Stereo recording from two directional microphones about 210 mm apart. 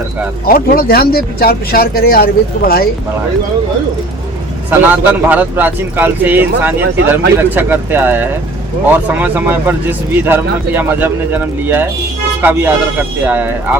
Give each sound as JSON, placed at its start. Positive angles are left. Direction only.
{"t": 0.4, "sound": "speech", "side_deg": 45}
{"t": 4.7, "sound": "speech", "side_deg": -10}